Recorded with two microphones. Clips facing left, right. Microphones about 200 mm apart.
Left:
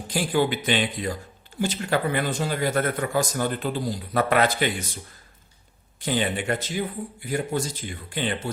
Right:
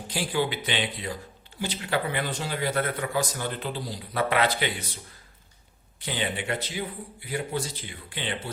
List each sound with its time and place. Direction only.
0.1 s a man's voice: 50° left (ahead or behind)
6.0 s a man's voice: 45° left (ahead or behind)